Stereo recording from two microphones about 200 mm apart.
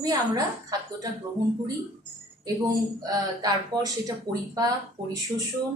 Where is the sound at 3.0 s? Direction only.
20° right (ahead or behind).